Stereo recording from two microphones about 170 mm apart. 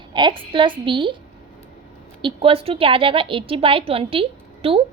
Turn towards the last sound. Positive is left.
turn(degrees=-35)  # may be behind; listen again after turning